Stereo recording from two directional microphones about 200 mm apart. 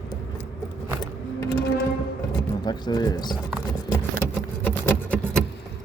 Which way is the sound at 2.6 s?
20° left (ahead or behind).